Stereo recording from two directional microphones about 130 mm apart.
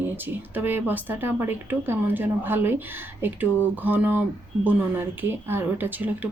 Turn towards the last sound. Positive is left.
turn(degrees=-15)  # may be behind; listen again after turning